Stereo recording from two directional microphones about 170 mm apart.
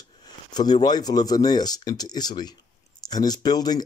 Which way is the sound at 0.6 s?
25° left (ahead or behind).